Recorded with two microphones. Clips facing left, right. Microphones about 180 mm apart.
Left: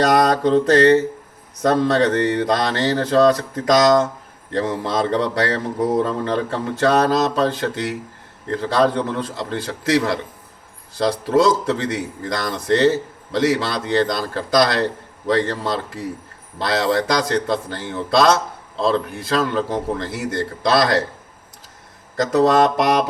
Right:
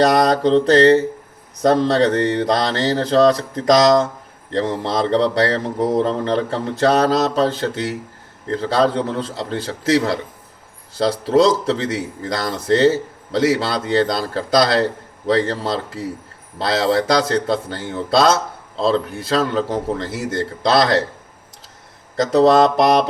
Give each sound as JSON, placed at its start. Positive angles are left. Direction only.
{"t": 0.1, "sound": "speech", "side_deg": -30}
{"t": 22.1, "sound": "speech", "side_deg": -30}